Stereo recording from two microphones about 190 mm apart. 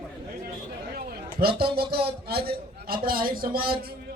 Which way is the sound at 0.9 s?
55° right (ahead or behind).